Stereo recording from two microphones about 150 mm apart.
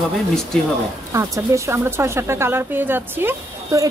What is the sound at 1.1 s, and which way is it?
Speech, 20° right (ahead or behind).